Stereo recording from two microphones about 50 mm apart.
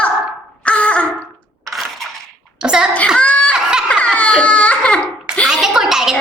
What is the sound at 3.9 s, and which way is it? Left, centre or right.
Baby cry, left.